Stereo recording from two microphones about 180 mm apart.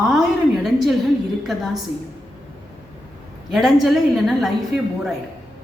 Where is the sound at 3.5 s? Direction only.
Centre (ahead or behind).